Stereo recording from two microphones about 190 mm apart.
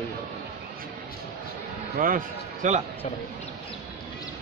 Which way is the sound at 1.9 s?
45° right (ahead or behind).